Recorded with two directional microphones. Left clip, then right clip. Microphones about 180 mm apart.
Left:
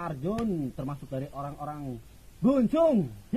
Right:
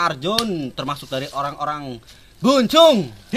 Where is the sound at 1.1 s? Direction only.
15° right (ahead or behind).